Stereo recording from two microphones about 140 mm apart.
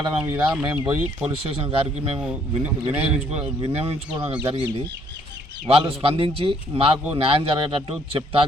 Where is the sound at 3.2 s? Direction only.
45° right (ahead or behind).